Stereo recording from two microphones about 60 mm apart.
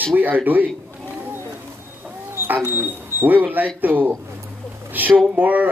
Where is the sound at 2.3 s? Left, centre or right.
Right.